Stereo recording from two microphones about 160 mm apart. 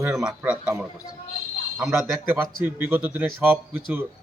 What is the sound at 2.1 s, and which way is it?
A man's voice, 15° right (ahead or behind).